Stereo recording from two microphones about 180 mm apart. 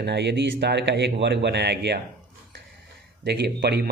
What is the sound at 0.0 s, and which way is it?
Speech, 70° right (ahead or behind).